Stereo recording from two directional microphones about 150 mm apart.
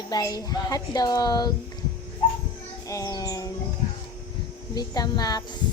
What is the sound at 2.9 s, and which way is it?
Speech, 20° left (ahead or behind).